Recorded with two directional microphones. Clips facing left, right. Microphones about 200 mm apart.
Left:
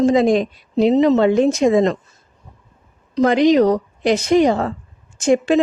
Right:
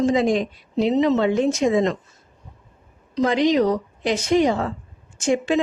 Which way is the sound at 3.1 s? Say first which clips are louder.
Left 5 dB; 55° left (ahead or behind).